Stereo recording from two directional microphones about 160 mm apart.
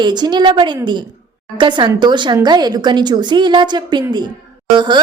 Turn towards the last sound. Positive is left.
turn(degrees=-30)  # may be behind; listen again after turning